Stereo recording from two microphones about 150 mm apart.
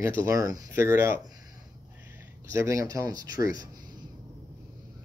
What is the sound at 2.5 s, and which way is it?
A man's voice, 20° right (ahead or behind).